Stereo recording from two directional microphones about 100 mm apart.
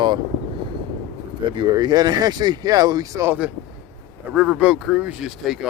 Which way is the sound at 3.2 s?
20° right (ahead or behind).